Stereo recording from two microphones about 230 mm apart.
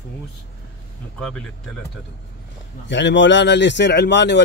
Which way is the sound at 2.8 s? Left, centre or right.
Left.